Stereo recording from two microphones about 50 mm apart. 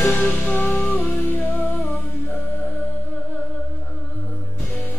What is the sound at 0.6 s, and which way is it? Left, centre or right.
Music, left.